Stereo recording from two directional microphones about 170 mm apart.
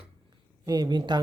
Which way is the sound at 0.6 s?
25° right (ahead or behind).